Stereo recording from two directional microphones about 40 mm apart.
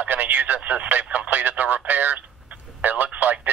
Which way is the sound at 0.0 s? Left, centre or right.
Right.